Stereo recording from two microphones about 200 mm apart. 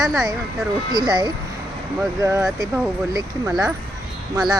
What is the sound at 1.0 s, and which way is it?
Speech, 20° right (ahead or behind).